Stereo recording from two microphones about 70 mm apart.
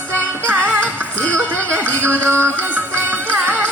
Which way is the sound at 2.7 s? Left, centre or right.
Right.